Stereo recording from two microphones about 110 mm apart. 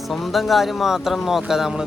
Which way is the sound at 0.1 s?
Centre (ahead or behind).